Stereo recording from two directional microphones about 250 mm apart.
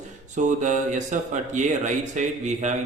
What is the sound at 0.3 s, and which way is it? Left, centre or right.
A man's voice, right.